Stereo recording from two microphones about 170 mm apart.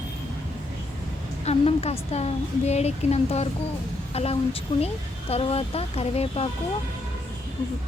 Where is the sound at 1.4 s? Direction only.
40° left (ahead or behind).